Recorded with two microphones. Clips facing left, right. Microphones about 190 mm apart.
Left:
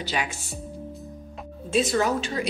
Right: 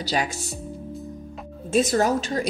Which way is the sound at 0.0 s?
40° right (ahead or behind).